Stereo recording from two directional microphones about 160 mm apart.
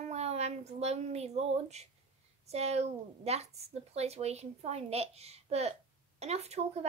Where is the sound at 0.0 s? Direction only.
40° right (ahead or behind).